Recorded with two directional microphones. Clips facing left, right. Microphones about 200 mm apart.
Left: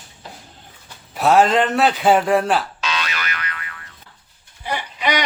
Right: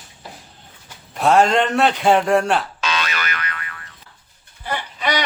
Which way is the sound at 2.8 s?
50° right (ahead or behind).